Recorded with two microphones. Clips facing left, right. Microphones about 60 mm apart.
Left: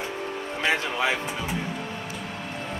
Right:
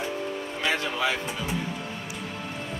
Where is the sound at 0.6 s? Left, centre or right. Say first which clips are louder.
Left 2 dB; left.